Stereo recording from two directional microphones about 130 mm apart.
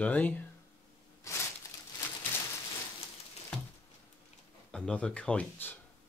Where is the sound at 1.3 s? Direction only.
25° left (ahead or behind).